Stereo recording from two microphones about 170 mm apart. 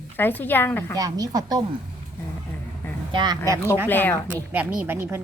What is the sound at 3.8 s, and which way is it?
Speech, 10° left (ahead or behind).